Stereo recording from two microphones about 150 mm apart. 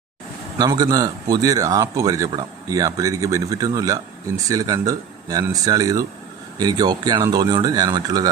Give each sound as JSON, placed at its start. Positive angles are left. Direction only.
{"t": 0.6, "sound": "speech", "side_deg": -25}